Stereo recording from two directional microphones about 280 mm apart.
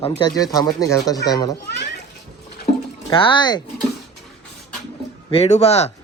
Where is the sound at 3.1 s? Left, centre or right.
Centre.